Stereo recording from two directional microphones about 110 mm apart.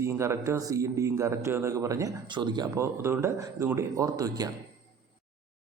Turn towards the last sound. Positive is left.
turn(degrees=-35)  # may be behind; listen again after turning